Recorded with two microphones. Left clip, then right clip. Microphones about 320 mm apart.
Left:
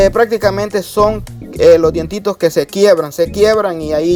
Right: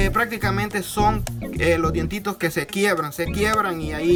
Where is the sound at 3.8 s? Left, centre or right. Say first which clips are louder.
Left 10 dB; centre.